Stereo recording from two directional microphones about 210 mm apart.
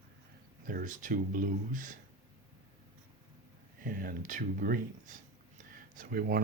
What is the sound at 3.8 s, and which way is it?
Speech, 40° right (ahead or behind).